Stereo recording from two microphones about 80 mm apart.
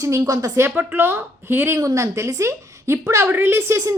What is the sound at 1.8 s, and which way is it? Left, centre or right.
A woman's voice, right.